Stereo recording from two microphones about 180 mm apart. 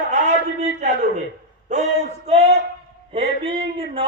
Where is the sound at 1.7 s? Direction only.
40° right (ahead or behind).